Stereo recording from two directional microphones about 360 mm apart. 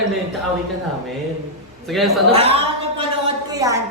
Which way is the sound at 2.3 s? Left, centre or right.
Centre.